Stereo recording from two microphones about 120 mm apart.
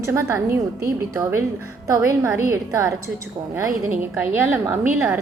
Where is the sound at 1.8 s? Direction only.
25° right (ahead or behind).